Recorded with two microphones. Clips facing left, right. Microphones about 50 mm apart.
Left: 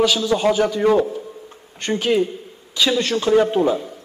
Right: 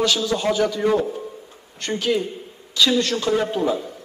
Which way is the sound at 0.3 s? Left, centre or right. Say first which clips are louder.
Left 3 dB; centre.